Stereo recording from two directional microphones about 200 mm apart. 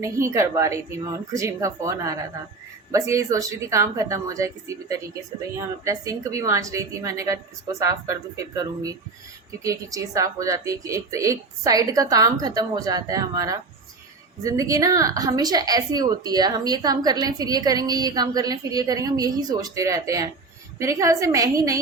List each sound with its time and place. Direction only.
0.0 s a woman's voice: 15° right (ahead or behind)